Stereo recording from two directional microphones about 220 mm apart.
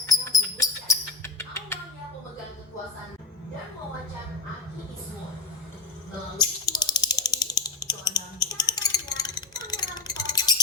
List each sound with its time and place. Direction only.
0.0 s music: 15° left (ahead or behind)
6.4 s ratchet: 20° left (ahead or behind)